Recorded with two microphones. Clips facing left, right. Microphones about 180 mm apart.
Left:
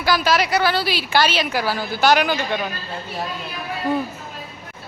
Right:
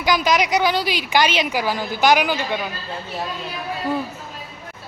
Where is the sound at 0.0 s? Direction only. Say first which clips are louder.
Even; 15° right (ahead or behind).